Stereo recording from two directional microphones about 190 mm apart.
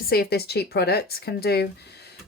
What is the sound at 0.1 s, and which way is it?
Speech, 55° left (ahead or behind).